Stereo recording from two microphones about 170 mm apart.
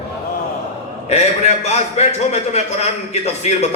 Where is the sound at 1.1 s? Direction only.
40° left (ahead or behind).